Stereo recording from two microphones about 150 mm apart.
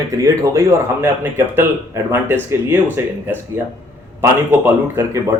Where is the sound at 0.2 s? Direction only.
20° right (ahead or behind).